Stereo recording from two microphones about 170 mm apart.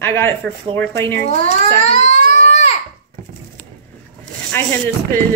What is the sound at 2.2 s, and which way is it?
Baby cry, 55° right (ahead or behind).